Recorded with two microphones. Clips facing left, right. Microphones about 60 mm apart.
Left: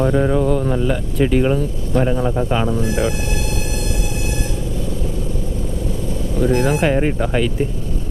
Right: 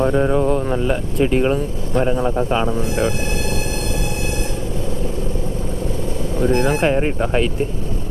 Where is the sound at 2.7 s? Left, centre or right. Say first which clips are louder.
Even; right.